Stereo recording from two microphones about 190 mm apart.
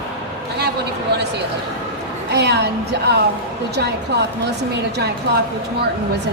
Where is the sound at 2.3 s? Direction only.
60° right (ahead or behind).